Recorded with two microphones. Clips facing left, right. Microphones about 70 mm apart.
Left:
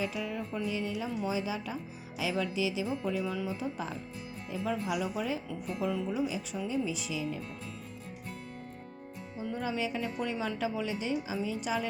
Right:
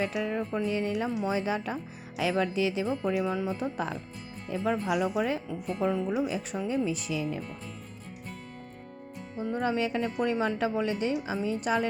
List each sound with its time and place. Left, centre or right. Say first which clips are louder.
0.0 s speech: right 5 dB; right
5.6 s music: right 5 dB; right
6.2 s speech: right 3 dB; right
9.4 s speech: right 5 dB; right